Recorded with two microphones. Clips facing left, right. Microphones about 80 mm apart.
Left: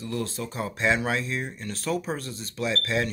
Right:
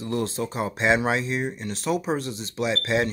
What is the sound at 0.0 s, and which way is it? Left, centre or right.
Speech, right.